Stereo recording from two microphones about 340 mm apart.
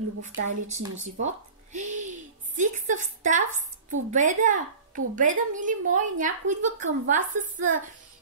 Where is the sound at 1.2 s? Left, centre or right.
Right.